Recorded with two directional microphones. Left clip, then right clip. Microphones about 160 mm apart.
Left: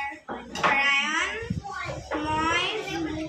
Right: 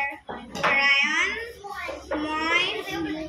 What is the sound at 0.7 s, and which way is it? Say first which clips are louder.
Cat: right 4 dB; 10° left (ahead or behind).